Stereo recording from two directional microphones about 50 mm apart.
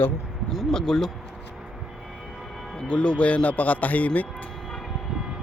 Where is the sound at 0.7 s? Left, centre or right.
Centre.